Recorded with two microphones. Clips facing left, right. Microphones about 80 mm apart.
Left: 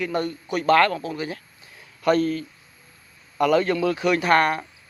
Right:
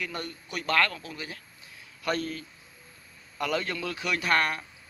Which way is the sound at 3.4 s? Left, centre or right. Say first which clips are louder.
Left 11 dB; left.